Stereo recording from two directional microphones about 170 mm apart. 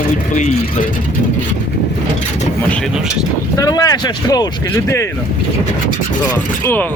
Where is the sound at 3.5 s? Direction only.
20° left (ahead or behind).